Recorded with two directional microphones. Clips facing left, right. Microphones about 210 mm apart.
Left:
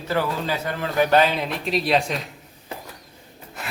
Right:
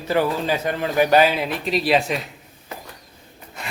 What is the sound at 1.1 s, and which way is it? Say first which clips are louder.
Speech: right 2 dB; 5° right (ahead or behind).